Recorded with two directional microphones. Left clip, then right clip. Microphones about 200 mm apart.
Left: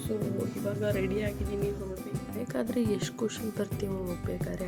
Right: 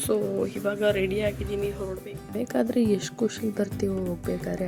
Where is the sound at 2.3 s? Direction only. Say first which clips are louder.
Right 7 dB; 20° right (ahead or behind).